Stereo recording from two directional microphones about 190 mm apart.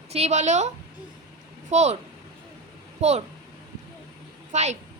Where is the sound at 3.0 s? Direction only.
35° right (ahead or behind).